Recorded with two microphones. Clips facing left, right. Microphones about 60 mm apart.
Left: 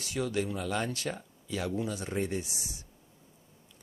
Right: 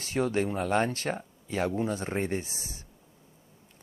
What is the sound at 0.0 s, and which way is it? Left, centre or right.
Speech, right.